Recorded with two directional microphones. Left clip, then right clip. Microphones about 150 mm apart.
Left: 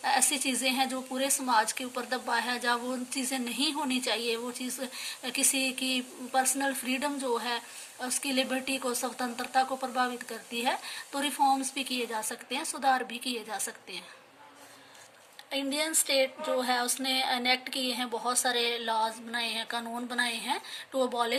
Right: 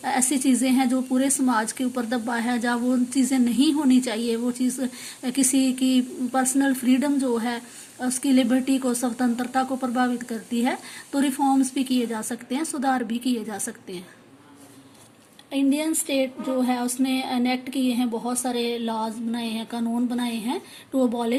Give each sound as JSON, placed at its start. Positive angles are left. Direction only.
{"t": 0.0, "sound": "speech", "side_deg": -20}
{"t": 15.5, "sound": "a woman's voice", "side_deg": -15}